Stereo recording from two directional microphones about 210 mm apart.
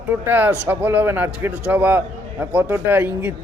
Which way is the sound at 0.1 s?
10° right (ahead or behind).